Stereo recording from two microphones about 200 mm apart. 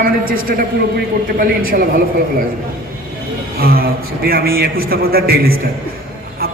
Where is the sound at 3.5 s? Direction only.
50° right (ahead or behind).